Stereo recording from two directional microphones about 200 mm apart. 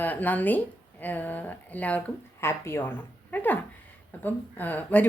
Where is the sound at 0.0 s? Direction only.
10° left (ahead or behind).